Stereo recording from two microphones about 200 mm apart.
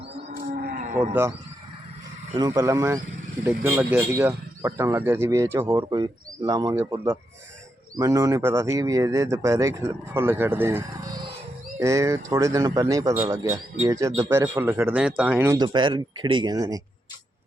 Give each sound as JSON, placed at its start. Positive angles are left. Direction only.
{"t": 0.3, "sound": "livestock", "side_deg": -45}
{"t": 2.3, "sound": "speech", "side_deg": -15}